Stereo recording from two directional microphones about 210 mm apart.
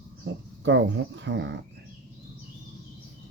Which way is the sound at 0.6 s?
60° right (ahead or behind).